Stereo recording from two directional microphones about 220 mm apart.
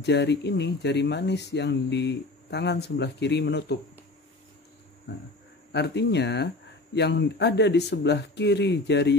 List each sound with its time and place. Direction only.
0.0 s speech: 50° left (ahead or behind)
5.7 s speech: 50° left (ahead or behind)